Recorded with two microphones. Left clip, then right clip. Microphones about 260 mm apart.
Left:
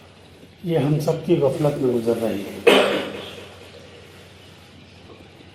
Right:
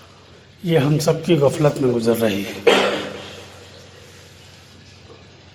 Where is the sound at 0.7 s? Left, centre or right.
Right.